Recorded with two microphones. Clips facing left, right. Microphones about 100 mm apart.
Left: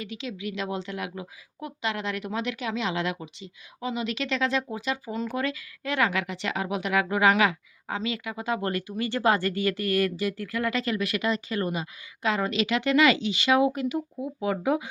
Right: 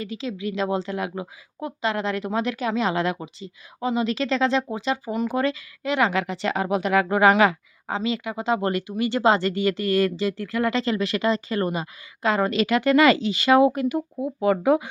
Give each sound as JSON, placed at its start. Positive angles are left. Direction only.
{"t": 0.0, "sound": "speech", "side_deg": -35}